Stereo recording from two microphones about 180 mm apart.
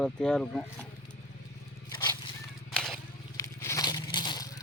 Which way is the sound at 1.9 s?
25° left (ahead or behind).